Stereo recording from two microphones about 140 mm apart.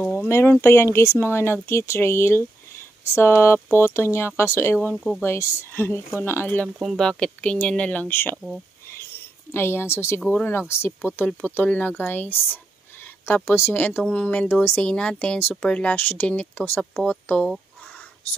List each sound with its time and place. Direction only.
0.0 s a sound: 10° left (ahead or behind)
0.3 s speech: 20° left (ahead or behind)
4.8 s speech: centre (ahead or behind)
5.2 s speech: 20° left (ahead or behind)
6.8 s speech: centre (ahead or behind)
8.4 s speech: centre (ahead or behind)
9.5 s speech: 15° left (ahead or behind)